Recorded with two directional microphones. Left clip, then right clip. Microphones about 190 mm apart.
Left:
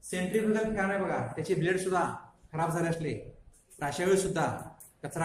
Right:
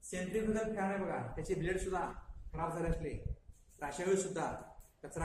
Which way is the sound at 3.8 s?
30° left (ahead or behind).